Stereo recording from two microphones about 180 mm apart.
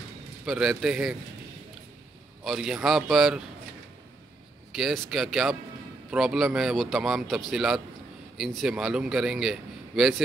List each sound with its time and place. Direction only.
0.5 s a man's voice: centre (ahead or behind)
2.4 s a man's voice: centre (ahead or behind)
4.7 s a man's voice: centre (ahead or behind)